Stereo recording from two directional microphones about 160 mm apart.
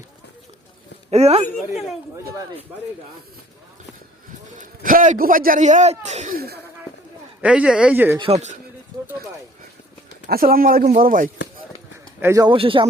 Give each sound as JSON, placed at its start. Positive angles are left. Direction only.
{"t": 1.1, "sound": "a man's voice", "side_deg": -40}
{"t": 4.6, "sound": "a man's voice", "side_deg": -60}
{"t": 6.3, "sound": "speech", "side_deg": -75}
{"t": 7.4, "sound": "speech", "side_deg": -5}
{"t": 8.2, "sound": "a man's voice", "side_deg": -45}
{"t": 10.2, "sound": "speech", "side_deg": -65}
{"t": 10.8, "sound": "speech", "side_deg": -55}
{"t": 12.2, "sound": "speech", "side_deg": -20}
{"t": 12.5, "sound": "a man's voice", "side_deg": -35}